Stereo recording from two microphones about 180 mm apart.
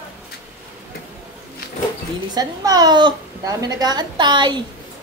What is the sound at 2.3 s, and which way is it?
A woman's voice, 20° right (ahead or behind).